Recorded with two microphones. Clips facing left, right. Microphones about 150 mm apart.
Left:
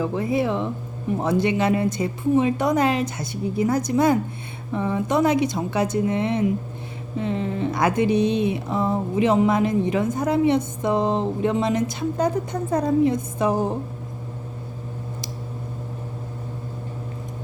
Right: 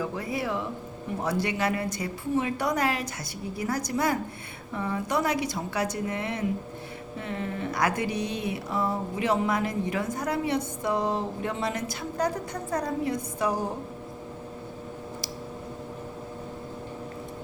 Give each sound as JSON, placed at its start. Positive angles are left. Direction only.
{"t": 0.0, "sound": "speech", "side_deg": 25}